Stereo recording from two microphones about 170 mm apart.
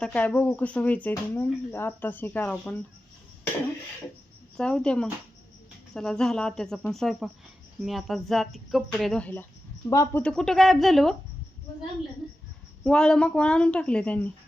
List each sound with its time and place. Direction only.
0.0 s speech: 5° left (ahead or behind)
4.5 s speech: 5° left (ahead or behind)
10.2 s speech: 5° left (ahead or behind)
12.8 s speech: 5° left (ahead or behind)